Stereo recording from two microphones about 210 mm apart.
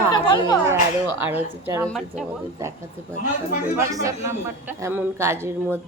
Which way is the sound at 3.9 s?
15° right (ahead or behind).